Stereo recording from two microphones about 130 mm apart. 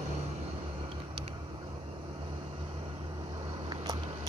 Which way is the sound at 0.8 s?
40° right (ahead or behind).